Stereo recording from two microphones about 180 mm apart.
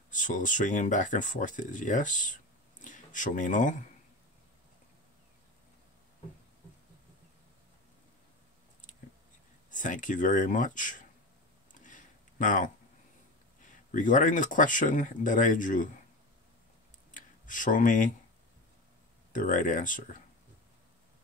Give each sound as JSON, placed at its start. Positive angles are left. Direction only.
{"t": 0.1, "sound": "speech", "side_deg": 45}
{"t": 9.7, "sound": "speech", "side_deg": 45}
{"t": 11.7, "sound": "a sound", "side_deg": 45}
{"t": 13.9, "sound": "speech", "side_deg": 45}
{"t": 17.1, "sound": "a sound", "side_deg": 45}
{"t": 19.3, "sound": "speech", "side_deg": 45}